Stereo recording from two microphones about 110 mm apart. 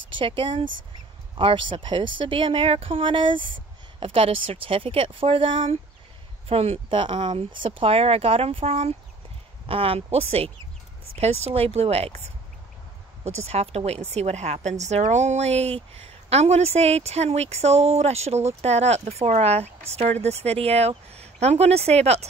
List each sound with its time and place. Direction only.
0.1 s speech: 50° right (ahead or behind)
6.5 s speech: 65° right (ahead or behind)
13.2 s a woman's voice: 75° right (ahead or behind)